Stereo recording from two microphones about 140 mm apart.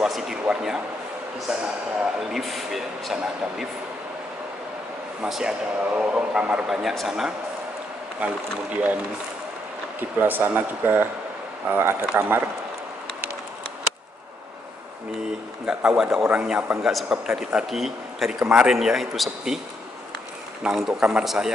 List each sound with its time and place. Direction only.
0.0 s speech: 5° right (ahead or behind)
5.2 s speech: 5° right (ahead or behind)
9.9 s speech: 15° right (ahead or behind)
15.6 s speech: 5° right (ahead or behind)
20.6 s speech: 5° right (ahead or behind)